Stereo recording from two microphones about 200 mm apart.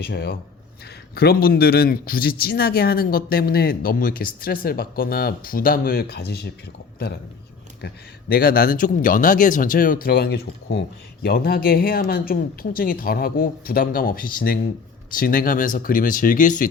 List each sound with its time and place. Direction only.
0.0 s speech: 55° left (ahead or behind)
7.8 s speech: 50° left (ahead or behind)